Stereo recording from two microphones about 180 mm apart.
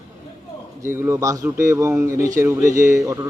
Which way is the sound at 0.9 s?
15° right (ahead or behind).